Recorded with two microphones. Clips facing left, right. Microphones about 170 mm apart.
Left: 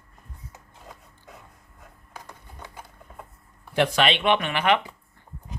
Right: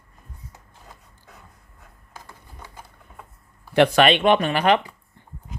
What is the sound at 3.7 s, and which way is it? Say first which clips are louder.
Speech: right 6 dB; 60° right (ahead or behind).